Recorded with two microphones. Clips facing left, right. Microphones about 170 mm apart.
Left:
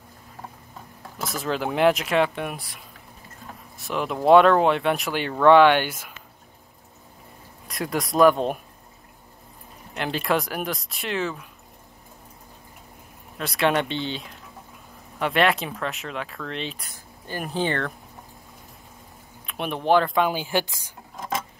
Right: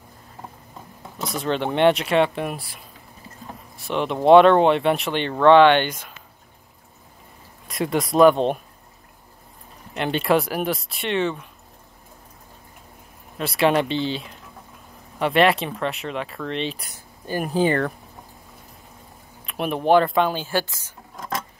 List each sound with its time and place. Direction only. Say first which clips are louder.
1.1 s speech: right 3 dB; centre (ahead or behind)
3.7 s speech: right 3 dB; centre (ahead or behind)
7.6 s speech: right 4 dB; centre (ahead or behind)
9.9 s speech: right 4 dB; centre (ahead or behind)
13.4 s speech: right 3 dB; centre (ahead or behind)
16.7 s speech: right 1 dB; 10° right (ahead or behind)
19.4 s speech: right 3 dB; centre (ahead or behind)
20.2 s speech: even; 15° left (ahead or behind)